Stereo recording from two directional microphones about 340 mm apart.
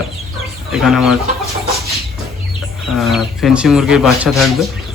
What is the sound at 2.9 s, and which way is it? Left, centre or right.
Speech, centre.